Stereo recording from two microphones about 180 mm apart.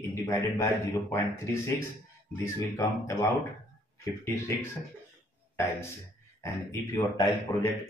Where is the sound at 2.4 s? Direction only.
15° left (ahead or behind).